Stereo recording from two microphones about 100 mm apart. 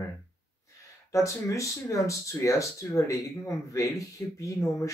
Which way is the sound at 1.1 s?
30° left (ahead or behind).